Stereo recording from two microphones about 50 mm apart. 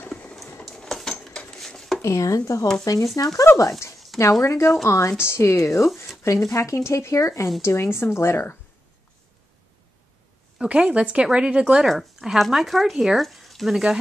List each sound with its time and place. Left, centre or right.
0.7 s cutlery: centre
1.5 s dishes: centre
2.0 s speech: left
3.5 s speech: left
4.4 s speech: left
6.2 s speech: left
7.6 s speech: left
10.6 s speech: centre
11.9 s speech: centre